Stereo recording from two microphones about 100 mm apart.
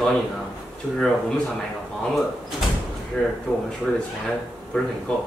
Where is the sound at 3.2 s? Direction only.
10° left (ahead or behind).